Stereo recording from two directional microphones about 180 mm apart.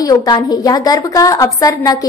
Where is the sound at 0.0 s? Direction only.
20° left (ahead or behind).